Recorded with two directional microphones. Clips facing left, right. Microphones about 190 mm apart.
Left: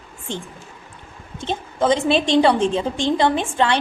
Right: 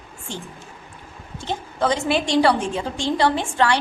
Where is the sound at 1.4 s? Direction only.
20° left (ahead or behind).